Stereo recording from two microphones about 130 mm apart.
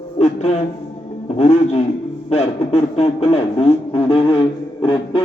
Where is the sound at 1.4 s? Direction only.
50° left (ahead or behind).